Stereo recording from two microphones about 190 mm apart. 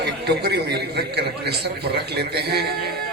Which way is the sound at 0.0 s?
60° right (ahead or behind).